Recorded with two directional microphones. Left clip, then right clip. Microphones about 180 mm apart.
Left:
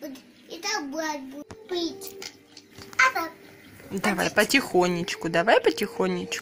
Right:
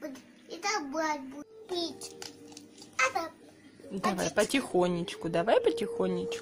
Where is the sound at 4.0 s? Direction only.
Centre (ahead or behind).